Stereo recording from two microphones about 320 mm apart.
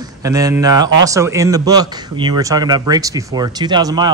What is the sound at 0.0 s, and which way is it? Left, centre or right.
A man's voice, centre.